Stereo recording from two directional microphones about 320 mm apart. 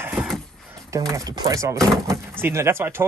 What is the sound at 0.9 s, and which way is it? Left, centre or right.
Speech, centre.